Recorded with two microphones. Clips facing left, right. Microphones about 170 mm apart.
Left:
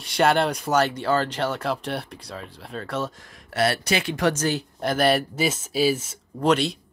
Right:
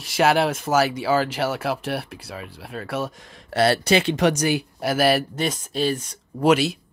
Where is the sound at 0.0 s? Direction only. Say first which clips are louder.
Right 1 dB; 5° right (ahead or behind).